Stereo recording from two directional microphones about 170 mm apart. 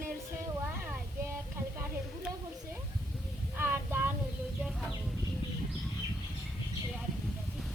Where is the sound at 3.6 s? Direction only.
10° right (ahead or behind).